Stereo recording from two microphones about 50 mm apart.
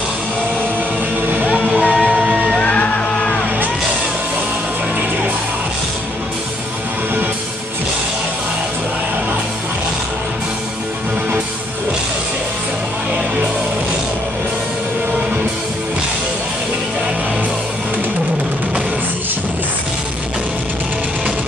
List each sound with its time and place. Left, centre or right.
1.3 s music: right
1.9 s music: left
2.1 s music: right
2.6 s music: left